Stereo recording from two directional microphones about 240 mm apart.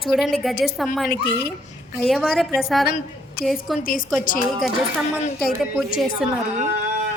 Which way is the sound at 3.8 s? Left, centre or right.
Left.